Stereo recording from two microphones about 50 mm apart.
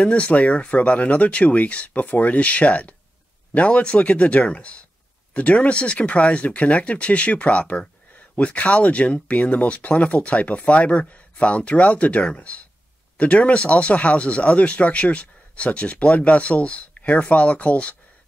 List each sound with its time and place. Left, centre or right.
0.0 s speech: left